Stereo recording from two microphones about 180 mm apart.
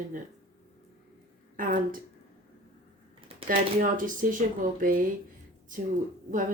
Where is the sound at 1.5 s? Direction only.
50° right (ahead or behind).